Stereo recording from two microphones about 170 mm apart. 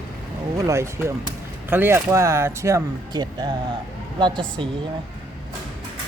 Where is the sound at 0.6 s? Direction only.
15° right (ahead or behind).